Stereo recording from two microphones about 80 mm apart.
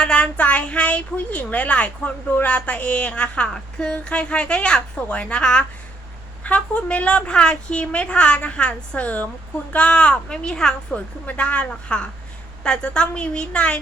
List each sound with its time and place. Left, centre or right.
0.0 s a woman's voice: centre